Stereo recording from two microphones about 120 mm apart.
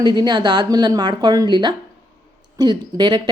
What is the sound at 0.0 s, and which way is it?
Speech, 35° right (ahead or behind).